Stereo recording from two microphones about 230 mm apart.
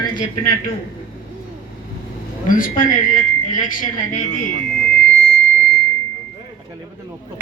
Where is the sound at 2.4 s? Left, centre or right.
Left.